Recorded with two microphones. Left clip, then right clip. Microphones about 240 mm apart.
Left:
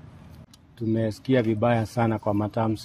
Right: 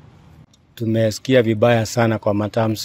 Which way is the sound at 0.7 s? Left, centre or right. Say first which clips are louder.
Right 8 dB; right.